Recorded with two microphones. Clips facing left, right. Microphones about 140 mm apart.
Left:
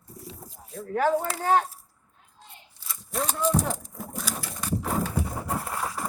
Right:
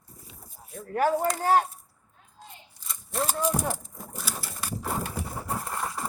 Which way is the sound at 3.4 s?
10° right (ahead or behind).